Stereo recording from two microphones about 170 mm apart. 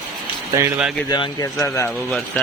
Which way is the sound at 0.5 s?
15° right (ahead or behind).